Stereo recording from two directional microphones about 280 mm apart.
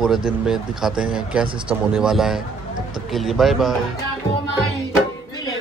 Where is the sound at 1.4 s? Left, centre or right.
Centre.